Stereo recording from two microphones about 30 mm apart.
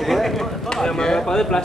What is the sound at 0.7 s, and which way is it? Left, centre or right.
Speech, centre.